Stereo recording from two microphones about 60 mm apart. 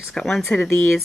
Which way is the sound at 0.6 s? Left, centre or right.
Left.